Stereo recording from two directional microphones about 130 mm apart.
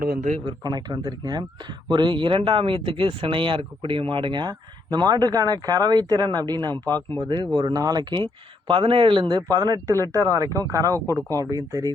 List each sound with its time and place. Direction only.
0.2 s a man's voice: 65° right (ahead or behind)
0.4 s speech: 30° right (ahead or behind)
6.8 s speech: 15° left (ahead or behind)
7.2 s speech: 35° right (ahead or behind)
11.0 s speech: 20° left (ahead or behind)
11.3 s speech: 30° right (ahead or behind)